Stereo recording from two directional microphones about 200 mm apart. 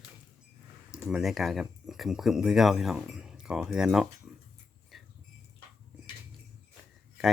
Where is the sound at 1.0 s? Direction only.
Centre (ahead or behind).